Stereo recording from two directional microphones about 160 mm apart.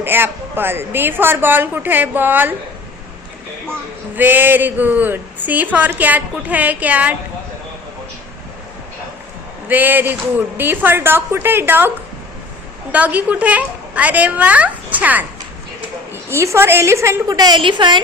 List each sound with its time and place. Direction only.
0.0 s speech: 15° right (ahead or behind)
4.1 s speech: 10° right (ahead or behind)
9.6 s speech: 10° right (ahead or behind)
12.9 s speech: 10° right (ahead or behind); by 18.0 s 30° right (ahead or behind)